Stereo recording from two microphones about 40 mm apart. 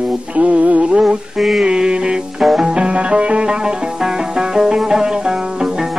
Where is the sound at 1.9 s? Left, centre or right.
Right.